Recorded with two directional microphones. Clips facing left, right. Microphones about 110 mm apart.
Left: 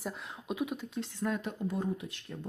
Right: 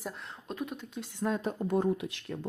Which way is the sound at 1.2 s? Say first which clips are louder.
Right 4 dB; 30° right (ahead or behind).